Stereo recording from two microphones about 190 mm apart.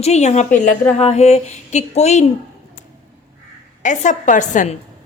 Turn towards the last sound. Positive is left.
turn(degrees=40)  # may be behind; listen again after turning